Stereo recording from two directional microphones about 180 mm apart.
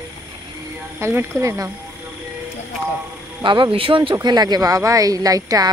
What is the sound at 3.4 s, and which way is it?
Speech, 25° right (ahead or behind).